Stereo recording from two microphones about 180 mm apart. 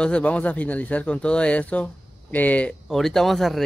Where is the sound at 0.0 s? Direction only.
5° left (ahead or behind).